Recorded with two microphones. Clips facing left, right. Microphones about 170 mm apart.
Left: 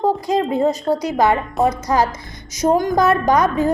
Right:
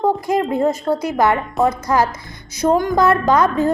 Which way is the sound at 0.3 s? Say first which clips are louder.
Even; 20° left (ahead or behind).